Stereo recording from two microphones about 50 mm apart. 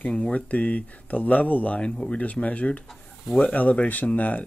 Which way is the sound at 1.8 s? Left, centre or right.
Centre.